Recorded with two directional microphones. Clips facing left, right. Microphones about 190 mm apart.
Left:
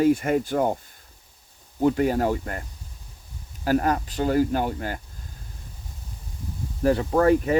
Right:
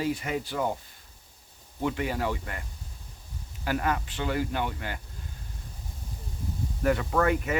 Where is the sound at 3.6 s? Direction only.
40° left (ahead or behind).